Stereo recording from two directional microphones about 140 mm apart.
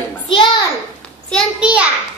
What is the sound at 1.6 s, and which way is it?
Speech, 10° right (ahead or behind).